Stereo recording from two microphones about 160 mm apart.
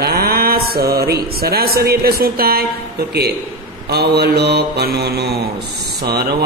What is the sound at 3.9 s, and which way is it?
Mantra, 85° right.